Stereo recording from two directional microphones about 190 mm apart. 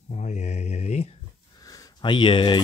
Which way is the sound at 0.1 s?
35° left (ahead or behind).